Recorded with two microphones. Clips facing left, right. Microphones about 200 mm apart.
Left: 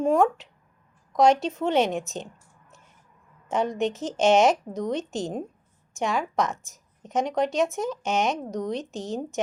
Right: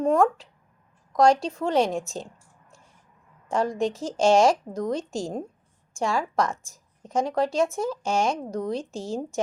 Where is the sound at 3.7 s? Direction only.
Centre (ahead or behind).